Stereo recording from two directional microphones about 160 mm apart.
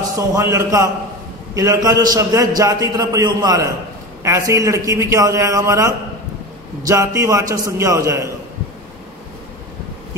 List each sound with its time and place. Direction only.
0.1 s a man's voice: 20° right (ahead or behind)